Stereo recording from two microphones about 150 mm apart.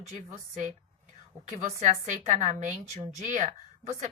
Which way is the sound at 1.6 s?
50° right (ahead or behind).